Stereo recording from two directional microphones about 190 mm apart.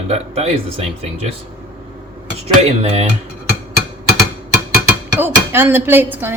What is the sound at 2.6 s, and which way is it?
Speech, 35° right (ahead or behind).